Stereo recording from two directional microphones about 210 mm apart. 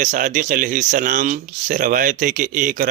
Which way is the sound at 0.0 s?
35° right (ahead or behind).